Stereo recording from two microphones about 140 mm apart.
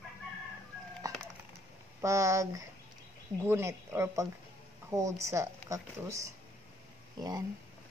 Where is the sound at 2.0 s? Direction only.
20° right (ahead or behind).